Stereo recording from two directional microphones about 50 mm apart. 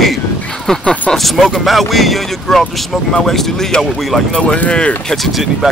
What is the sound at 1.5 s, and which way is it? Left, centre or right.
Speech, centre.